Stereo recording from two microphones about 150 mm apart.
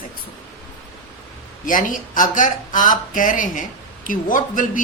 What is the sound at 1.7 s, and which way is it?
Speech, 65° left (ahead or behind).